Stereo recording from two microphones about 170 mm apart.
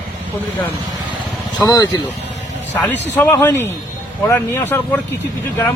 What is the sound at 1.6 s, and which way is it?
Speech, 25° left (ahead or behind).